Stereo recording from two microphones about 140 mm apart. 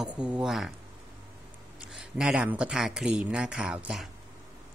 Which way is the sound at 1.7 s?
5° right (ahead or behind).